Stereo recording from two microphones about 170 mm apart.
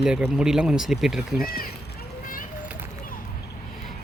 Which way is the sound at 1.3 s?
60° left (ahead or behind).